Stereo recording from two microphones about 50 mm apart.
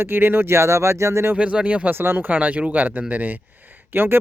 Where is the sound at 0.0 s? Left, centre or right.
Right.